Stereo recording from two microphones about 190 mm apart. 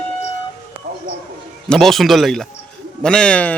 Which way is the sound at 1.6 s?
Centre (ahead or behind).